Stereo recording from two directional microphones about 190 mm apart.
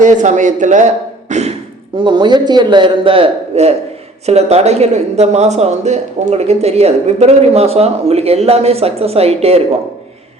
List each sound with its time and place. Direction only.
0.0 s speech: 40° right (ahead or behind)
1.3 s beatboxing: 35° right (ahead or behind)
2.0 s a man's voice: 25° right (ahead or behind)